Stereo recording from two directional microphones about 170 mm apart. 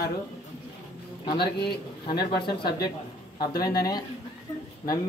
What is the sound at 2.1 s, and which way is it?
Speech, 65° left (ahead or behind).